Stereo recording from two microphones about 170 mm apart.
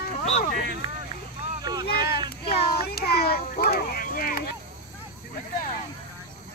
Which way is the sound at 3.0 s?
70° left (ahead or behind).